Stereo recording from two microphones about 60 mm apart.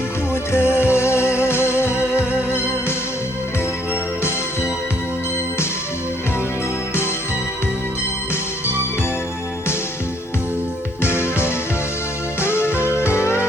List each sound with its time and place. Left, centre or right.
0.5 s music: left
11.0 s music: left